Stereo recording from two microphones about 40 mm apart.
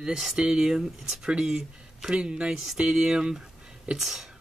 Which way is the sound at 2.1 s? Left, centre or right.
Right.